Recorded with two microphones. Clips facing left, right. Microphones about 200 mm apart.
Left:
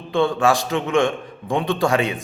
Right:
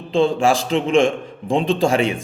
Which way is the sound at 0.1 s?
25° right (ahead or behind).